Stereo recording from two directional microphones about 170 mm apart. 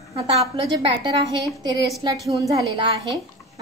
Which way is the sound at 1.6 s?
25° right (ahead or behind).